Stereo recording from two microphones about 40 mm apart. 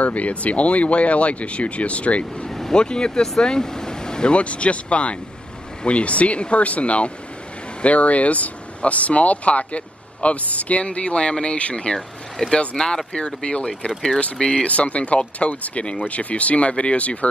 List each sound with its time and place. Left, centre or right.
0.0 s speech: left
2.4 s vehicle: centre
2.8 s speech: left